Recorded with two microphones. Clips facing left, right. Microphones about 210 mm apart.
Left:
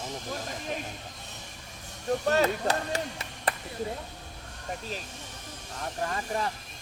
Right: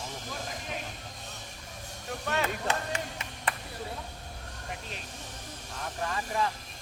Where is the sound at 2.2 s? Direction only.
35° left (ahead or behind).